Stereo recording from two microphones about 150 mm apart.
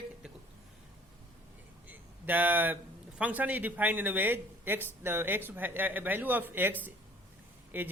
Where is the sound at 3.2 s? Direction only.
10° right (ahead or behind).